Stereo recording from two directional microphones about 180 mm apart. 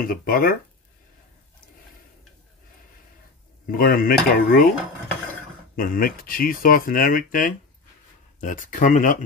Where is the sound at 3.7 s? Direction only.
55° left (ahead or behind).